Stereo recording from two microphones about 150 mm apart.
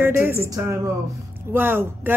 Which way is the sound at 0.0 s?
15° right (ahead or behind).